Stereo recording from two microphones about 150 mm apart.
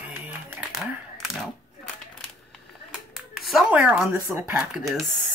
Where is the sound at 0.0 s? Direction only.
5° right (ahead or behind).